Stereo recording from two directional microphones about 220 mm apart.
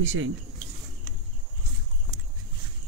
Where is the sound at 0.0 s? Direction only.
60° right (ahead or behind).